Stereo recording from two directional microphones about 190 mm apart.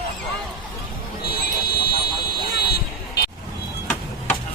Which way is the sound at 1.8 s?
55° left (ahead or behind).